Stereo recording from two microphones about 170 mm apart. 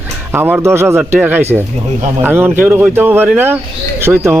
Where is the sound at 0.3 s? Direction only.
10° right (ahead or behind).